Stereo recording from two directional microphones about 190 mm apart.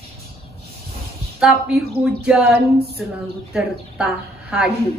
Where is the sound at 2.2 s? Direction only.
5° right (ahead or behind).